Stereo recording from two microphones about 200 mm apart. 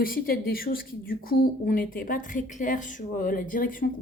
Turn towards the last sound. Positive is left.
turn(degrees=45)  # may be behind; listen again after turning